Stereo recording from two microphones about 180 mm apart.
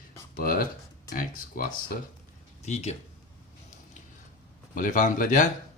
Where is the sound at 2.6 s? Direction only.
40° left (ahead or behind).